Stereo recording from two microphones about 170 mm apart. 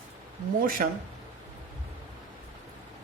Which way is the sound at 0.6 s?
55° right (ahead or behind).